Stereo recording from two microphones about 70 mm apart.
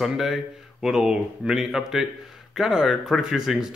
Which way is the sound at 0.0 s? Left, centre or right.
Centre.